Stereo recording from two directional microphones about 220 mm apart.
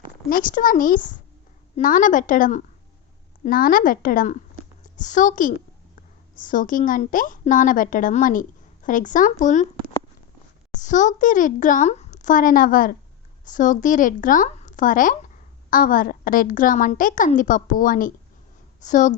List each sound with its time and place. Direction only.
0.3 s a woman's voice: 40° left (ahead or behind)